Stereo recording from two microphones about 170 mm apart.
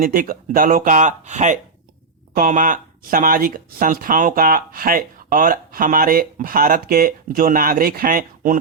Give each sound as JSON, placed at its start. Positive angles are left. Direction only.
{"t": 0.0, "sound": "speech", "side_deg": -55}